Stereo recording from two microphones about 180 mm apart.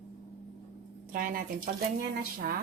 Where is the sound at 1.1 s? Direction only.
50° right (ahead or behind).